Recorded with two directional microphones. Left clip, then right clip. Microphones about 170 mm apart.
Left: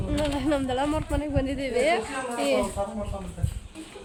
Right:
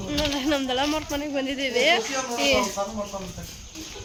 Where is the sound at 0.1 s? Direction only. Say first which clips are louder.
Right 1 dB; 5° left (ahead or behind).